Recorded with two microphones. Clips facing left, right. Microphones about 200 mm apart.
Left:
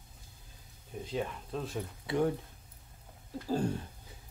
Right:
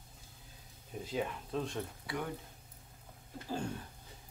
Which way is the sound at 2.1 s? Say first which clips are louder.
Left 10 dB; 25° left (ahead or behind).